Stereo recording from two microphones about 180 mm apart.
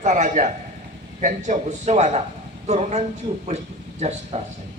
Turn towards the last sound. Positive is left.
turn(degrees=-35)  # may be behind; listen again after turning